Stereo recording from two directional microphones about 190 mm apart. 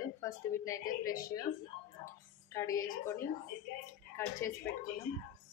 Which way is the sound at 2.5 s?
15° left (ahead or behind).